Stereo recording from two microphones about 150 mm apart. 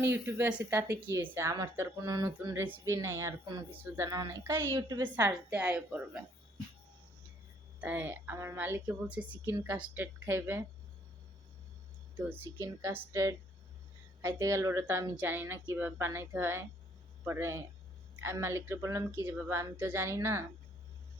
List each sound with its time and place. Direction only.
0.0 s speech: 15° right (ahead or behind)
4.7 s speech: 30° right (ahead or behind)
5.1 s speech: 10° right (ahead or behind)
7.8 s speech: 10° right (ahead or behind)
12.4 s speech: 20° right (ahead or behind)
14.2 s speech: 20° right (ahead or behind)